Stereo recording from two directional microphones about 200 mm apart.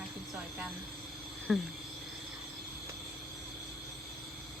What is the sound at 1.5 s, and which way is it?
Speech, 5° right (ahead or behind).